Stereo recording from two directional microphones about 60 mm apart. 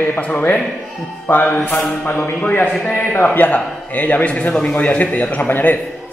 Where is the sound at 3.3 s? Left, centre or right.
Left.